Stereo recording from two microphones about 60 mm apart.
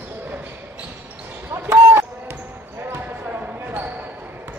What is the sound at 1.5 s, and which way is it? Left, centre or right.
Basketball bounce, right.